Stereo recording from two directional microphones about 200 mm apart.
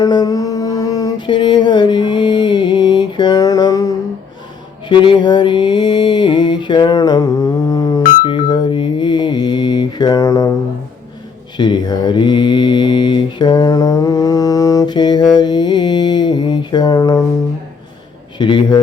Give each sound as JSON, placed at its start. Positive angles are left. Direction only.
{"t": 0.0, "sound": "mantra", "side_deg": 20}
{"t": 11.5, "sound": "mantra", "side_deg": 20}
{"t": 18.3, "sound": "mantra", "side_deg": 25}